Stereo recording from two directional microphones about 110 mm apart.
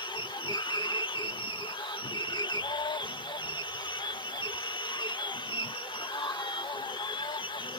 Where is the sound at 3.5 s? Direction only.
45° left (ahead or behind).